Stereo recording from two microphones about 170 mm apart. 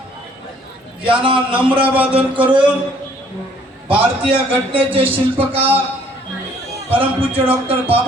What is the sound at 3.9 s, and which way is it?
A man's voice, 30° right (ahead or behind).